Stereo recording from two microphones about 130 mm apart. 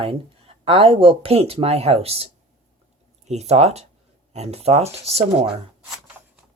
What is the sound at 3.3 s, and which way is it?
Speech, 55° right (ahead or behind).